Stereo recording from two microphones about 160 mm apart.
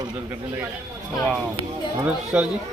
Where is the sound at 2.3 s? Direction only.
10° right (ahead or behind).